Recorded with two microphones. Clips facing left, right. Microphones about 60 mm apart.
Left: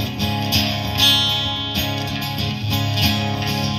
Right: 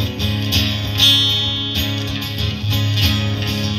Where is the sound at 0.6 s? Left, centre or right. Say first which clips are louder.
Even; left.